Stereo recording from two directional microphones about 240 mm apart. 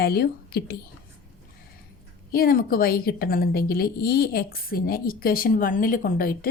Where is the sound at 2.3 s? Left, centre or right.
Left.